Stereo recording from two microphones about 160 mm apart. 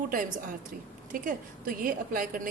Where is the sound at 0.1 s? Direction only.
60° right (ahead or behind).